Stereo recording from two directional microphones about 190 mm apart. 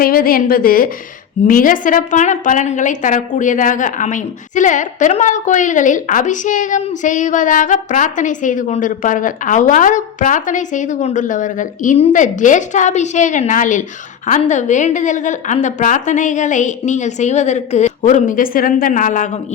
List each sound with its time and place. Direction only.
0.0 s a woman's voice: 50° left (ahead or behind)